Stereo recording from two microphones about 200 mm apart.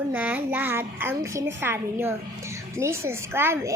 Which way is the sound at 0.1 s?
10° right (ahead or behind).